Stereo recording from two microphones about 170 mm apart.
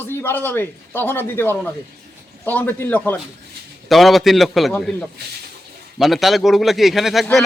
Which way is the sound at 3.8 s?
Centre (ahead or behind).